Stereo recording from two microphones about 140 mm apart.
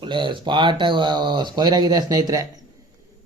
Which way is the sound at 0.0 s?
35° right (ahead or behind).